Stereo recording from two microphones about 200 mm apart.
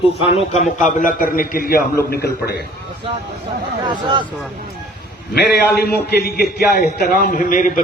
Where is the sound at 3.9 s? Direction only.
25° right (ahead or behind).